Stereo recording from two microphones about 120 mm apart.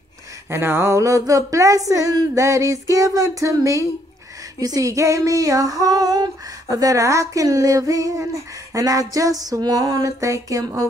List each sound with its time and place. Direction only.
0.5 s female singing: 20° right (ahead or behind)